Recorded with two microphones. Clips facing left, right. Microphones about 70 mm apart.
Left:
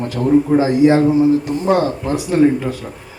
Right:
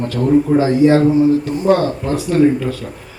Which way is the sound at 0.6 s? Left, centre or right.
Left.